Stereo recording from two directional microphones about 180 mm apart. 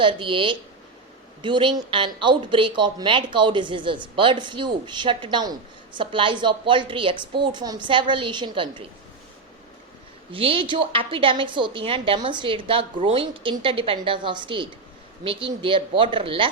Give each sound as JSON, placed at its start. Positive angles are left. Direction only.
{"t": 0.0, "sound": "speech", "side_deg": -30}
{"t": 10.3, "sound": "speech", "side_deg": -30}